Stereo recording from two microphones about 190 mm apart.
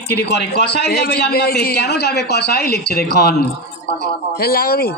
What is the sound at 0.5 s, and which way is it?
A man's voice, 55° left (ahead or behind).